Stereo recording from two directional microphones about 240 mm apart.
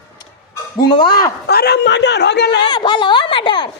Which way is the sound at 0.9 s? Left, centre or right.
Centre.